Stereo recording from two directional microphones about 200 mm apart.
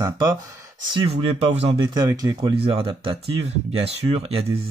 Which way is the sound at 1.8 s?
20° right (ahead or behind).